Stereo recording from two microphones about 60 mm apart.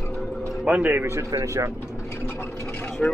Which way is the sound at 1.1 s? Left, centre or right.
Right.